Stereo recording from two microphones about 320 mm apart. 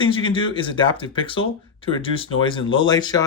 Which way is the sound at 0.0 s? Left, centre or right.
Centre.